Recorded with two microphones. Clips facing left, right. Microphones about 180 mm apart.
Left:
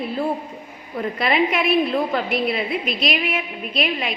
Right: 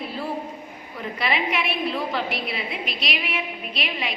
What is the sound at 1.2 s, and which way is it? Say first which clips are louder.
Speech: left 5 dB; 45° left (ahead or behind).